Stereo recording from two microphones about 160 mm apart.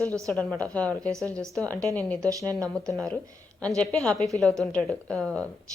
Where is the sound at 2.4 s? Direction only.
20° right (ahead or behind).